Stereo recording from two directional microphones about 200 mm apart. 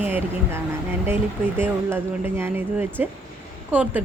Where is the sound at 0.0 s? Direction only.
10° right (ahead or behind).